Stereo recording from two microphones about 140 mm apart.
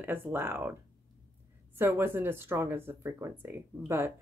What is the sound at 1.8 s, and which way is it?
Speech, 15° right (ahead or behind).